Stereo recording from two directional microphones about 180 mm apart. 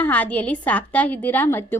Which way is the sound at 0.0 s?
10° left (ahead or behind).